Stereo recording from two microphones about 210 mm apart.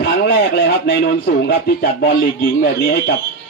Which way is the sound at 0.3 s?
50° left (ahead or behind).